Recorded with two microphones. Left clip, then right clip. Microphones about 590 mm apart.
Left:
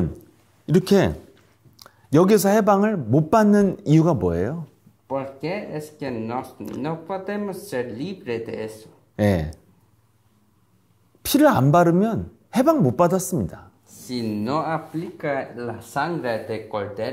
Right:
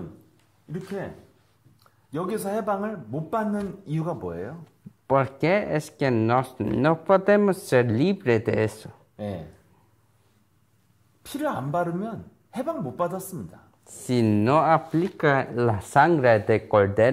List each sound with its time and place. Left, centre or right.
2.0 s speech: left
5.0 s speech: right
9.1 s speech: left
11.3 s a woman's voice: left
14.0 s speech: right